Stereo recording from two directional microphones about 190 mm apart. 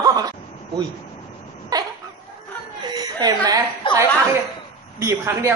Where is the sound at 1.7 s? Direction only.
20° right (ahead or behind).